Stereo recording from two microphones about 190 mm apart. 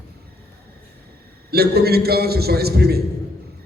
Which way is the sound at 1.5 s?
55° right (ahead or behind).